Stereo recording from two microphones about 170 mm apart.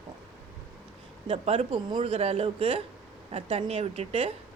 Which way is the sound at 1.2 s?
35° right (ahead or behind).